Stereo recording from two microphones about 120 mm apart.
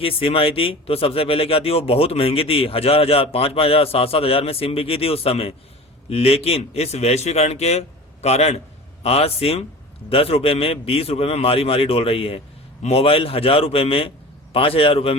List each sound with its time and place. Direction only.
0.0 s a man's voice: 50° left (ahead or behind)